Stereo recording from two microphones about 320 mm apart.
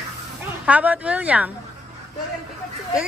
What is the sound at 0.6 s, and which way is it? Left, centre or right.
Speech, centre.